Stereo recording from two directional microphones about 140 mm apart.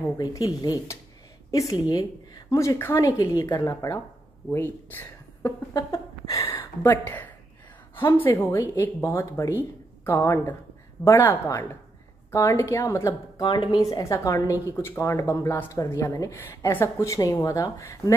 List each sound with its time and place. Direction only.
0.2 s a woman's voice: 25° left (ahead or behind)
13.4 s a woman's voice: 35° left (ahead or behind)